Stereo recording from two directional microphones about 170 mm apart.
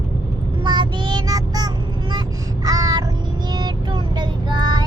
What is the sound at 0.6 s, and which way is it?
Child singing, 25° right (ahead or behind).